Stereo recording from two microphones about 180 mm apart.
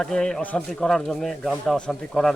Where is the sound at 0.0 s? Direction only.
5° left (ahead or behind).